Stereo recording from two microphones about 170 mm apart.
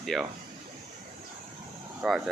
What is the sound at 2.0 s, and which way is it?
Speech, centre (ahead or behind).